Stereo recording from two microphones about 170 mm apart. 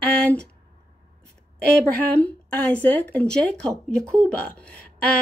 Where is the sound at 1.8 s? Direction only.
10° left (ahead or behind).